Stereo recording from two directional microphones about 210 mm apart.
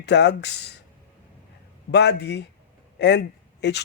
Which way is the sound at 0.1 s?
55° left (ahead or behind).